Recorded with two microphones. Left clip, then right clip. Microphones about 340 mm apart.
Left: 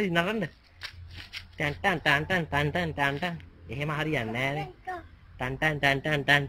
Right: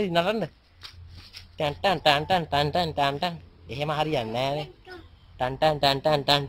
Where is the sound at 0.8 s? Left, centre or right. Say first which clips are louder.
Left 4 dB; left.